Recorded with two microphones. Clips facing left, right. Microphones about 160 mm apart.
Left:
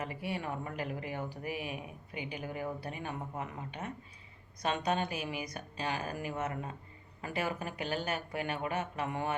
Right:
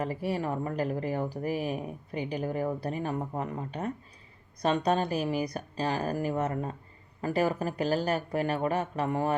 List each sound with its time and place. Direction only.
0.0 s speech: 35° right (ahead or behind)